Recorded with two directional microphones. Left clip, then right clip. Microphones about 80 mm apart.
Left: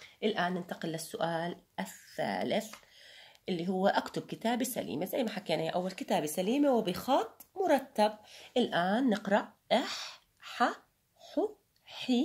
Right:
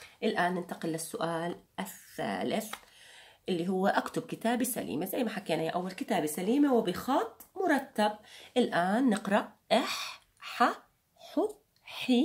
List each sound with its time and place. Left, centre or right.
0.2 s speech: left
3.4 s speech: centre; by 5.9 s left
5.9 s a woman's voice: left
8.5 s speech: centre
9.0 s speech: centre
11.9 s a sound: centre